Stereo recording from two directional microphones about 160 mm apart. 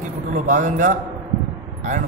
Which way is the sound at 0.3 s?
50° right (ahead or behind).